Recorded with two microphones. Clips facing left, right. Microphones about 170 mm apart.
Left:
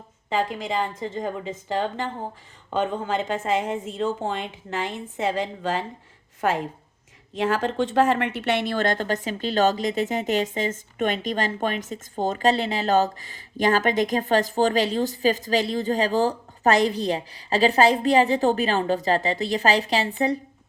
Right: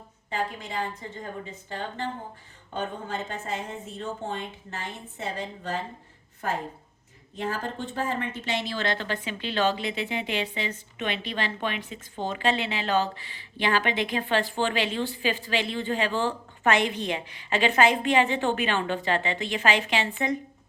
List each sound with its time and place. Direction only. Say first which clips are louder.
0.3 s a woman's voice: left 6 dB; 90° left; by 20.4 s 35° left (ahead or behind)